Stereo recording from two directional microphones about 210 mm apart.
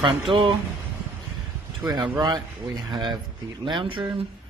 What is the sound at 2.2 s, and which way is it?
Speech, centre (ahead or behind).